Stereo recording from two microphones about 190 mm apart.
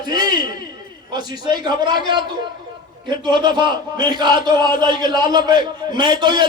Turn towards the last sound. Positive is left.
turn(degrees=-25)  # may be behind; listen again after turning